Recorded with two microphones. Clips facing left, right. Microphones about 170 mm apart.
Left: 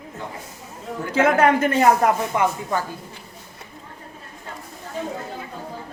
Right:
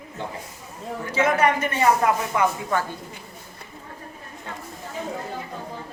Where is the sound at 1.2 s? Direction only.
60° left (ahead or behind).